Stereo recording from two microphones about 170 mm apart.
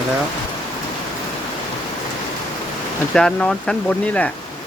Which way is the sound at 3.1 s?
5° left (ahead or behind).